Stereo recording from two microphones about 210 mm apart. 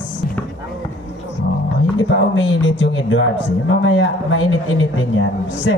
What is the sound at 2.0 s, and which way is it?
A man's voice, 65° left (ahead or behind).